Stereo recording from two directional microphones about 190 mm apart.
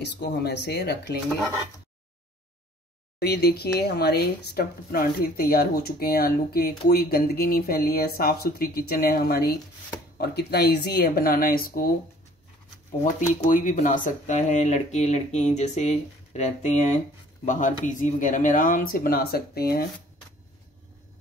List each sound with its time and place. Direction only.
0.0 s speech: 60° left (ahead or behind)
3.2 s speech: 60° left (ahead or behind)
13.0 s speech: 45° left (ahead or behind)